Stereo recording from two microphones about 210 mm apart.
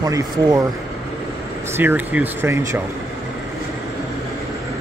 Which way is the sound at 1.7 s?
10° right (ahead or behind).